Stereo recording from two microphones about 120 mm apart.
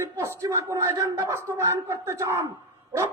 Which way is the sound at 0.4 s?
25° right (ahead or behind).